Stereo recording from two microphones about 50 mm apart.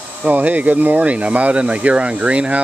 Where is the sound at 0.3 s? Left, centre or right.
Right.